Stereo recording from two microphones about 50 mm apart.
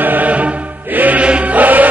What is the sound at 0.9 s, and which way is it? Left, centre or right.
Music, right.